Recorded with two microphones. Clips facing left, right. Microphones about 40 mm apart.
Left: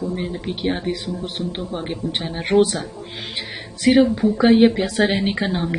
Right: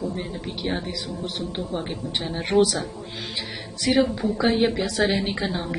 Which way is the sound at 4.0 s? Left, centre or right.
Centre.